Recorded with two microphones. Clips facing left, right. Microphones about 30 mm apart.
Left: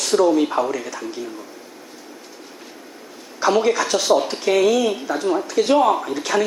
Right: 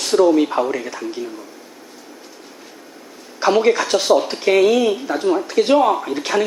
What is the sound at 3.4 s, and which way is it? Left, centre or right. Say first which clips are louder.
Speech: right 2 dB; centre.